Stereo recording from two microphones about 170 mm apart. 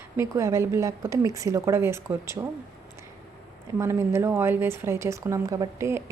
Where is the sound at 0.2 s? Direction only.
15° right (ahead or behind).